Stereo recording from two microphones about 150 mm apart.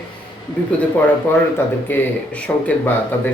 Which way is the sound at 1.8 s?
10° left (ahead or behind).